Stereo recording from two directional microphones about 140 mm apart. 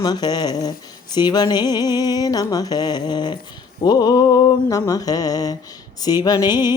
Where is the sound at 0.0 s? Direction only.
30° left (ahead or behind).